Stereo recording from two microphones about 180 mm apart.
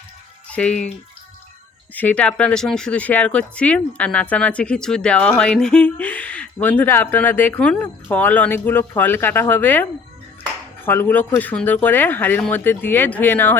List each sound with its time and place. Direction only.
0.5 s speech: 5° left (ahead or behind)
2.0 s speech: 10° left (ahead or behind)
10.8 s speech: 10° left (ahead or behind)